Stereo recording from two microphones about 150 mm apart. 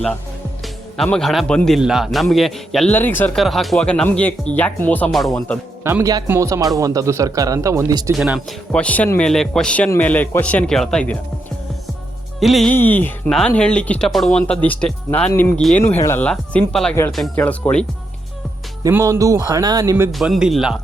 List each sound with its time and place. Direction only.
0.9 s a man's voice: 5° left (ahead or behind)
2.9 s speech: 15° left (ahead or behind)
3.3 s a man's voice: centre (ahead or behind)
5.8 s speech: 20° right (ahead or behind)
8.1 s speech: centre (ahead or behind)
12.4 s a man's voice: centre (ahead or behind)
12.7 s a man's voice: 10° left (ahead or behind)
18.8 s speech: 20° right (ahead or behind)
20.1 s a man's voice: centre (ahead or behind)